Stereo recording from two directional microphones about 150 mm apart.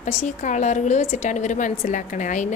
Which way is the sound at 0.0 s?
50° left (ahead or behind).